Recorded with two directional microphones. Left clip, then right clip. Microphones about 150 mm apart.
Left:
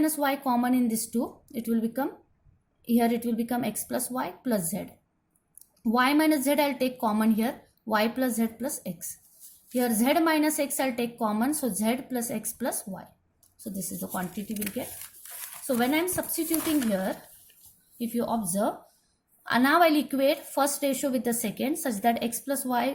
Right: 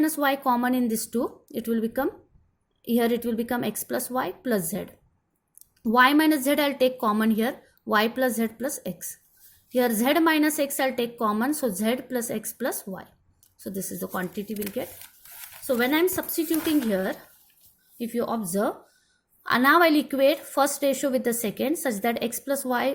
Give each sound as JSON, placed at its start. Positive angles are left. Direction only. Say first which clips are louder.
{"t": 0.0, "sound": "a woman's voice", "louder": "right 3 dB", "side_deg": -40}
{"t": 5.9, "sound": "a woman's voice", "louder": "right 4 dB", "side_deg": -40}
{"t": 15.6, "sound": "a woman's voice", "louder": "right 4 dB", "side_deg": -45}